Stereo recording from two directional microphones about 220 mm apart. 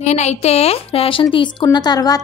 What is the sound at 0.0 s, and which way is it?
A woman's voice, 30° left (ahead or behind).